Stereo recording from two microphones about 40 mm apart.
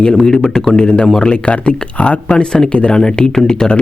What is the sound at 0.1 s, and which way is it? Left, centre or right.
Speech, centre.